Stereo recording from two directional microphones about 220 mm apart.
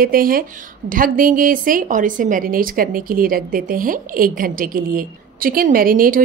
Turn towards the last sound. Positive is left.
turn(degrees=-40)  # may be behind; listen again after turning